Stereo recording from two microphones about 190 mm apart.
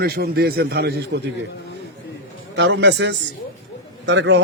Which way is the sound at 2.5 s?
65° right (ahead or behind).